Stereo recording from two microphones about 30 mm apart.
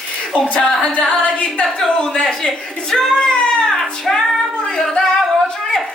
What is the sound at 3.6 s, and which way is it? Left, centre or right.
Child singing, centre.